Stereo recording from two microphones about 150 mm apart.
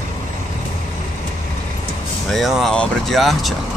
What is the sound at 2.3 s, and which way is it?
Speech, centre (ahead or behind).